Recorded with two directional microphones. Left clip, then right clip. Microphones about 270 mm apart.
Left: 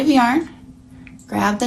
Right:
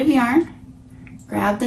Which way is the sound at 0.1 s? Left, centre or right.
Centre.